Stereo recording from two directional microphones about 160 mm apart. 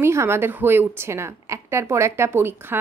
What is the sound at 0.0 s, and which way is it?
A woman's voice, 15° right (ahead or behind).